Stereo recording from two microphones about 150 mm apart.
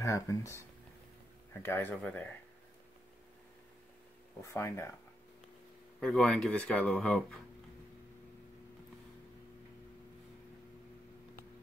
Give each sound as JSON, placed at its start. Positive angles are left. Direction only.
{"t": 0.0, "sound": "speech", "side_deg": 20}
{"t": 1.6, "sound": "speech", "side_deg": 15}
{"t": 4.4, "sound": "speech", "side_deg": 20}
{"t": 5.9, "sound": "speech", "side_deg": 0}